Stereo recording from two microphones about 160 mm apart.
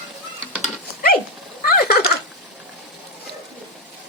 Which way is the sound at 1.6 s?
70° left (ahead or behind).